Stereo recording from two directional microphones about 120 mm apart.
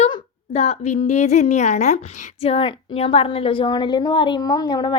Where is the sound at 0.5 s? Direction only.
60° left (ahead or behind).